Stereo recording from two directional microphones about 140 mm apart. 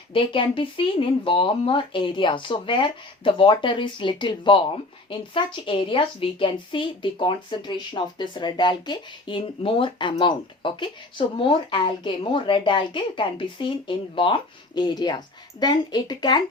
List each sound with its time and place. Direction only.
0.1 s a woman's voice: 40° left (ahead or behind)